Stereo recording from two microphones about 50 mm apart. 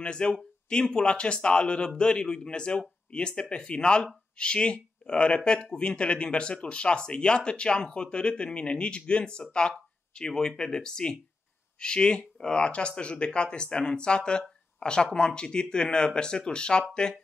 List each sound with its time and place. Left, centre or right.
0.0 s speech: centre